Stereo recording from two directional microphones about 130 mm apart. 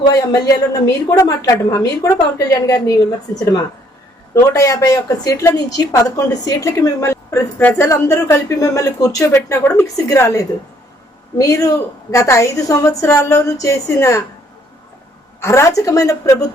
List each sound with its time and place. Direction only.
0.1 s a woman's voice: 25° left (ahead or behind)
15.4 s a woman's voice: 20° left (ahead or behind)